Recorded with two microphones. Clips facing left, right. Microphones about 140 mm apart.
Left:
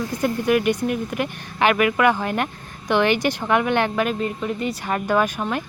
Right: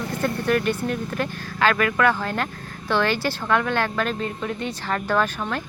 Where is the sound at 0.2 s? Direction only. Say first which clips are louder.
Left 3 dB; 10° left (ahead or behind).